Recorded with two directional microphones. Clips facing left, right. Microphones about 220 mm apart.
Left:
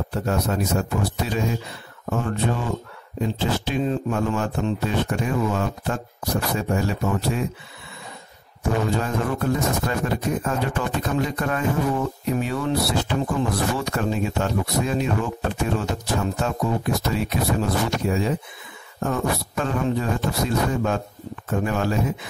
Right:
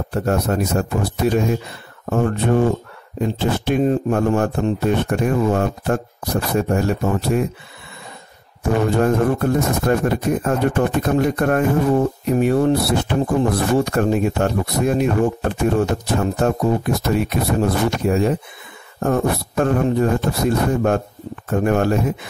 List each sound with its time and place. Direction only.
0.1 s speech: 50° right (ahead or behind)
8.9 s speech: 50° right (ahead or behind)